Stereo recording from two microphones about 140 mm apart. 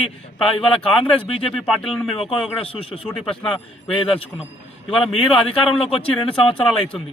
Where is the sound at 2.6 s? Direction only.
40° left (ahead or behind).